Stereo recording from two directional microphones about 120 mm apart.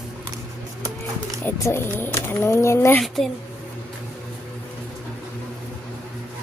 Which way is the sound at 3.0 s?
Centre (ahead or behind).